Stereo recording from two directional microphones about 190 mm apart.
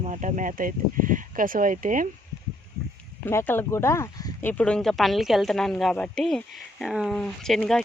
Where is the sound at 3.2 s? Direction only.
10° left (ahead or behind).